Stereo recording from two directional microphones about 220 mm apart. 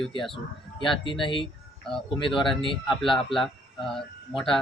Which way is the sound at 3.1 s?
20° left (ahead or behind).